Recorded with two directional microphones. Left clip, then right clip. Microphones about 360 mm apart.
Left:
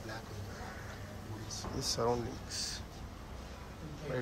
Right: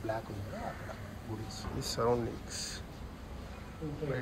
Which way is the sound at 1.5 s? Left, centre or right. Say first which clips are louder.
Left 3 dB; left.